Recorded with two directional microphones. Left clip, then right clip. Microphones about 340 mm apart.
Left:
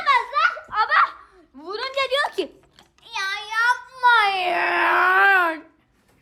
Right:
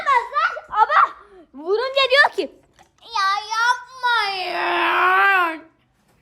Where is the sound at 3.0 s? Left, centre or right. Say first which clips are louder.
Right 6 dB; centre.